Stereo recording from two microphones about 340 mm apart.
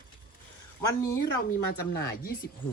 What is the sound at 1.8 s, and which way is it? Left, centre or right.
Speech, left.